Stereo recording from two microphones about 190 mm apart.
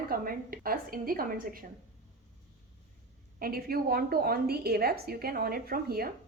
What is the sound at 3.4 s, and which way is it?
A woman's voice, 50° right (ahead or behind).